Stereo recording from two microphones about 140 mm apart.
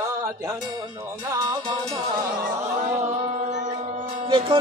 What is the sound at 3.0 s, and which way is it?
Music, 60° right (ahead or behind).